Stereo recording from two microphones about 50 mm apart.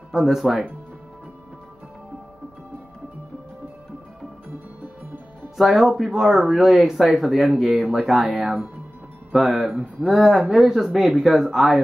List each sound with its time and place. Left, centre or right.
0.1 s speech: centre
4.8 s music: right
5.6 s speech: centre
6.5 s speech: centre
9.3 s speech: centre